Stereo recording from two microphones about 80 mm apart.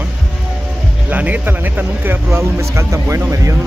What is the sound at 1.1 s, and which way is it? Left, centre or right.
Speech, centre.